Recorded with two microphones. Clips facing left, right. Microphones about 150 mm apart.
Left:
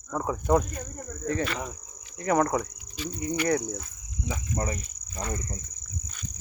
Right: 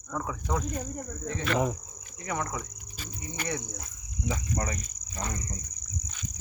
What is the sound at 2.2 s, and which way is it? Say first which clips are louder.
Speech: left 9 dB; 55° left (ahead or behind).